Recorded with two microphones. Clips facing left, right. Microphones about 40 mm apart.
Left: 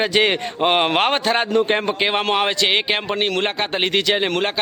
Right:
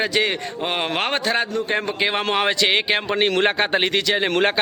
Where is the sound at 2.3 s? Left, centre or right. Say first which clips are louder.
Left 1 dB; centre.